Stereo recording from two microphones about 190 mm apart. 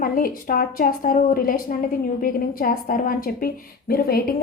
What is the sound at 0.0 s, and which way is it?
Speech, 50° left (ahead or behind).